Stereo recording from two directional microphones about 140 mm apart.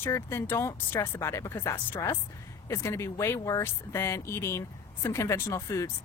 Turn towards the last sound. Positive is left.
turn(degrees=20)  # may be behind; listen again after turning